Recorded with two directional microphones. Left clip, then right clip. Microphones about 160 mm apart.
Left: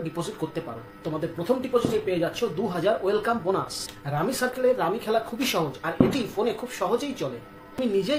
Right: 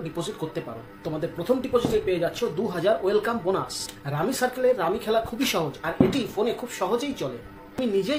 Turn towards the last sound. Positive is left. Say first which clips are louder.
# even
turn(degrees=0)  # may be behind; listen again after turning